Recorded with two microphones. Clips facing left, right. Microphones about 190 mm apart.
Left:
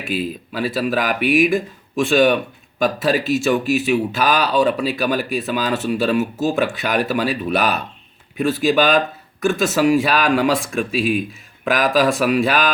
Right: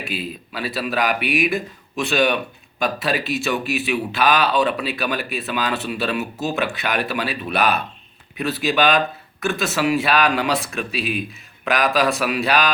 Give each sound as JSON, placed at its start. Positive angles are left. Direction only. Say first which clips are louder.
{"t": 0.0, "sound": "speech", "louder": "left 5 dB", "side_deg": 45}